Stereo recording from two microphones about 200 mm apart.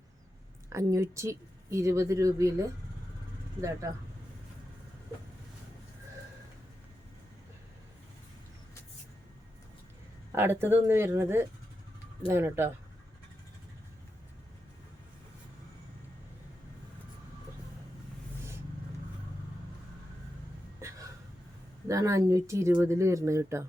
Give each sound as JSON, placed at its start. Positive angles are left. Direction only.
{"t": 0.7, "sound": "speech", "side_deg": -15}
{"t": 3.8, "sound": "speech", "side_deg": -15}
{"t": 10.3, "sound": "speech", "side_deg": -10}
{"t": 20.8, "sound": "a sound", "side_deg": -15}
{"t": 21.8, "sound": "speech", "side_deg": -15}